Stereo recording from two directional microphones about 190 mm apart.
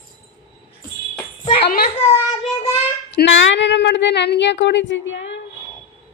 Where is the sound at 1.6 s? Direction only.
50° left (ahead or behind).